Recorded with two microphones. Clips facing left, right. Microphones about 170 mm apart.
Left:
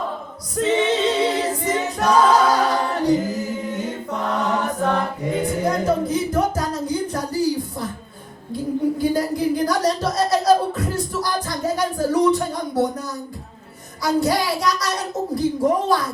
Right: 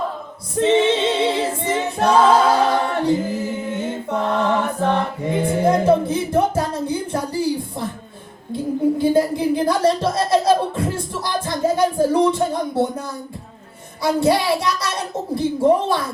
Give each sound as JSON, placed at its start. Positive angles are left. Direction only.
{"t": 0.5, "sound": "a capella", "side_deg": -25}
{"t": 3.1, "sound": "mantra", "side_deg": -25}
{"t": 5.4, "sound": "music", "side_deg": -30}
{"t": 8.5, "sound": "a sound", "side_deg": -25}
{"t": 14.0, "sound": "a child's voice", "side_deg": -25}